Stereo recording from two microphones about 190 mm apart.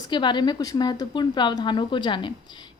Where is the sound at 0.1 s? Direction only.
25° left (ahead or behind).